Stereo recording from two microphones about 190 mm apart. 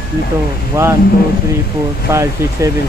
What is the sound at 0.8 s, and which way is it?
Speech, 15° right (ahead or behind).